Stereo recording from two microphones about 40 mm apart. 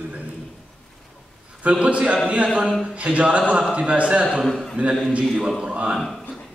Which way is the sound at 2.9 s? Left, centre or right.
Right.